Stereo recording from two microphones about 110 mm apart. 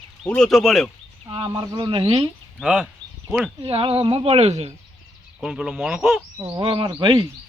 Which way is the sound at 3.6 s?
55° right (ahead or behind).